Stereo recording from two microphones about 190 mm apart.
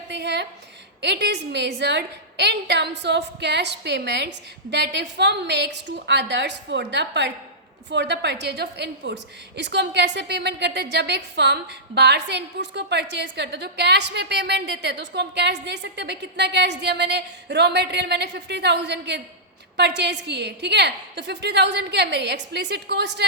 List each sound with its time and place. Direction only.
0.1 s a woman's voice: 65° right (ahead or behind)